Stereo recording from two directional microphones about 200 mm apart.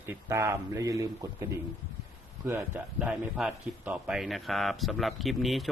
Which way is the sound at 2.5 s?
10° right (ahead or behind).